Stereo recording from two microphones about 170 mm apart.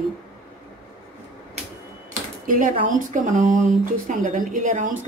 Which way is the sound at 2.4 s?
50° right (ahead or behind).